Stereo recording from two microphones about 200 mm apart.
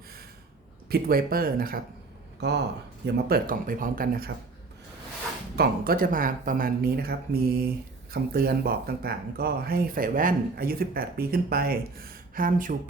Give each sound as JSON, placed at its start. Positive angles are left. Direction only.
{"t": 0.9, "sound": "speech", "side_deg": -50}
{"t": 2.4, "sound": "speech", "side_deg": -55}
{"t": 3.2, "sound": "speech", "side_deg": -45}
{"t": 5.5, "sound": "speech", "side_deg": -50}